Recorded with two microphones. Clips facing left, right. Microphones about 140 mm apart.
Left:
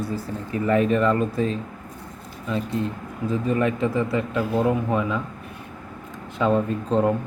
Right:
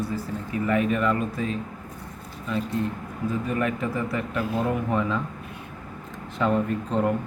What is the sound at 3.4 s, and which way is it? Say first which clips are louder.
Speech: left 7 dB; 25° left (ahead or behind).